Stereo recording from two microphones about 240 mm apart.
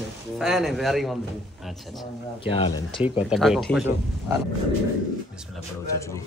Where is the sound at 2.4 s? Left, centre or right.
Left.